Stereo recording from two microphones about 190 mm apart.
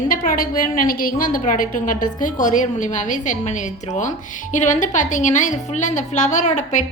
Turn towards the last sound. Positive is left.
turn(degrees=40)  # may be behind; listen again after turning